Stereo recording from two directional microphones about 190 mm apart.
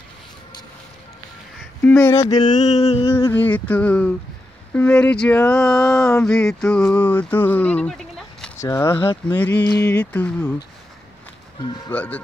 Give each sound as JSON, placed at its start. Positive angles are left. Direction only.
{"t": 1.8, "sound": "speech", "side_deg": 10}
{"t": 2.6, "sound": "a sound", "side_deg": 35}
{"t": 3.3, "sound": "speech", "side_deg": 10}
{"t": 8.5, "sound": "speech", "side_deg": 15}
{"t": 11.6, "sound": "speech", "side_deg": 25}
{"t": 11.9, "sound": "speech", "side_deg": 10}